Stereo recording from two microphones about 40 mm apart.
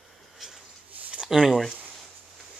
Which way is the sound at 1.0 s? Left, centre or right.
Right.